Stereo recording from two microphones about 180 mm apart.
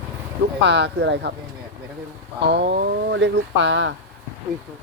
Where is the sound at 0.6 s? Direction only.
70° right (ahead or behind).